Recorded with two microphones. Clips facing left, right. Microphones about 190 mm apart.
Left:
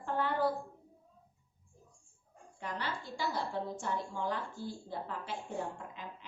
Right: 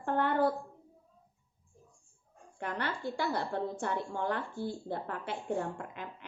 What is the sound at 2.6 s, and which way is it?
A woman's voice, 60° right (ahead or behind).